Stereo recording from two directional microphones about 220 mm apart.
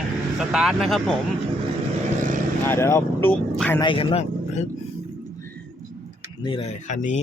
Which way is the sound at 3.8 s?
20° left (ahead or behind).